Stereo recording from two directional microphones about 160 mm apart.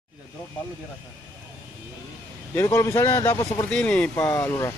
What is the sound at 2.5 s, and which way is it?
Speech, 15° left (ahead or behind).